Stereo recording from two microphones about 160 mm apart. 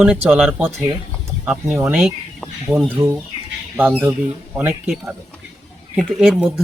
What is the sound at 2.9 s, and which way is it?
Speech, 15° right (ahead or behind).